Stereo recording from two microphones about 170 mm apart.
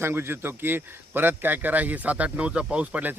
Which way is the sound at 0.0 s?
15° right (ahead or behind).